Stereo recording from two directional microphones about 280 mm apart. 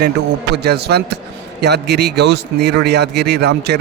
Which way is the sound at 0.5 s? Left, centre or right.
Right.